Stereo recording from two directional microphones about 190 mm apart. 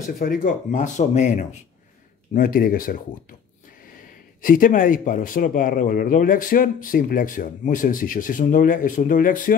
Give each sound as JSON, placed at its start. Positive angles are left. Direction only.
{"t": 0.2, "sound": "speech", "side_deg": 45}
{"t": 4.4, "sound": "speech", "side_deg": 45}